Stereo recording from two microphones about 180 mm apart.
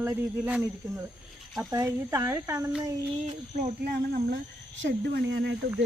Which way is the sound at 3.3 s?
40° right (ahead or behind).